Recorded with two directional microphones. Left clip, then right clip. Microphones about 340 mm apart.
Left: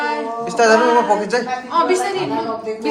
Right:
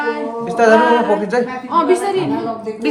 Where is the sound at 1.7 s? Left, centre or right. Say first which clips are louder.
Right 2 dB; centre.